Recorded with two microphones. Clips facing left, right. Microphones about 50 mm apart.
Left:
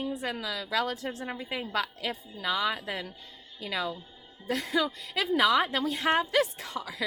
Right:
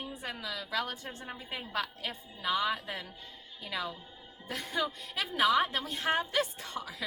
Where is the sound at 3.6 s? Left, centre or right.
Left.